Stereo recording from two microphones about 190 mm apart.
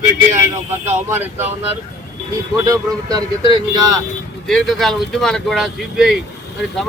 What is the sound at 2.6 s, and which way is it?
Speech, 20° right (ahead or behind).